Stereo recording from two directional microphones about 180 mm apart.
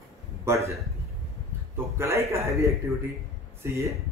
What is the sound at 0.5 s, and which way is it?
Speech, 15° right (ahead or behind).